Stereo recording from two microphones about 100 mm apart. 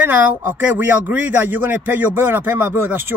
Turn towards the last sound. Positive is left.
turn(degrees=-20)  # may be behind; listen again after turning